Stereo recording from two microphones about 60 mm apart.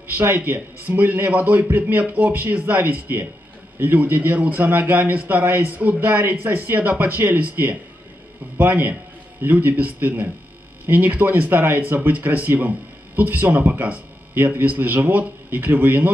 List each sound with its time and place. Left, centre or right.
0.4 s a man's voice: right